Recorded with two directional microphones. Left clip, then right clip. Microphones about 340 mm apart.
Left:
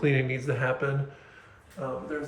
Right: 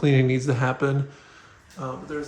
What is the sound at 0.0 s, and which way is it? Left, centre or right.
Speech, centre.